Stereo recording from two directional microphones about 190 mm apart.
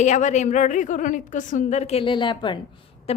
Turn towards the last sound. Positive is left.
turn(degrees=35)  # may be behind; listen again after turning